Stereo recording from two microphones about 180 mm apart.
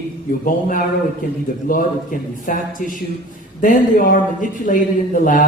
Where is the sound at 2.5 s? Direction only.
50° left (ahead or behind).